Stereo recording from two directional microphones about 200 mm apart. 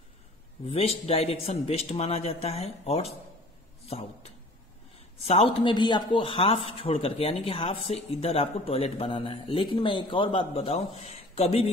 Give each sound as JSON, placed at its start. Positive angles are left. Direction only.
{"t": 0.7, "sound": "a man's voice", "side_deg": 30}